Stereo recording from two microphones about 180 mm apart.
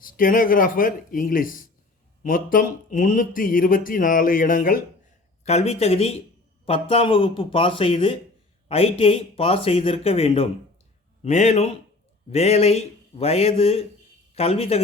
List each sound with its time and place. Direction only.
0.0 s speech: 50° left (ahead or behind)
5.5 s speech: 35° left (ahead or behind)